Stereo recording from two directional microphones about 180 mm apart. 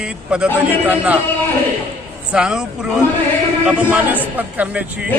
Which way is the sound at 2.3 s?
5° right (ahead or behind).